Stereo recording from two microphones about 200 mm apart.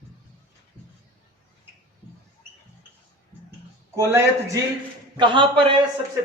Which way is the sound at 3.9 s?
15° right (ahead or behind).